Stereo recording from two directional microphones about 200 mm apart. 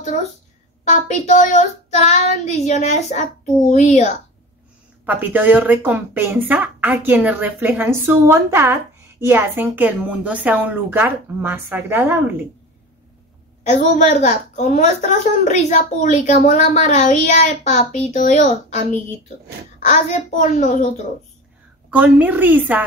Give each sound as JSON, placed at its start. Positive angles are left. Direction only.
{"t": 0.0, "sound": "a woman's voice", "side_deg": 35}
{"t": 5.0, "sound": "speech", "side_deg": -10}
{"t": 14.2, "sound": "a woman's voice", "side_deg": 35}
{"t": 21.9, "sound": "speech", "side_deg": -5}